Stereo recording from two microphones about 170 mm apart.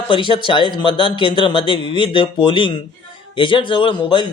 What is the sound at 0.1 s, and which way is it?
Speech, 30° left (ahead or behind).